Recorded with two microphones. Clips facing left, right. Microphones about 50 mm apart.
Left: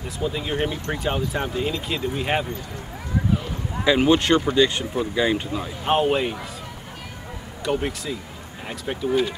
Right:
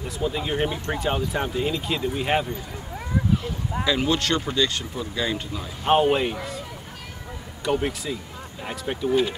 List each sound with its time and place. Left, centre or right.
0.2 s speech: centre
3.8 s speech: left
5.9 s speech: centre
7.6 s speech: centre